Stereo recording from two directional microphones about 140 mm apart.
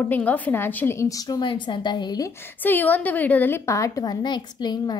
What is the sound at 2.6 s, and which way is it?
A woman's voice, 15° left (ahead or behind).